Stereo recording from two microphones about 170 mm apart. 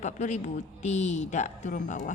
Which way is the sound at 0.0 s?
45° left (ahead or behind).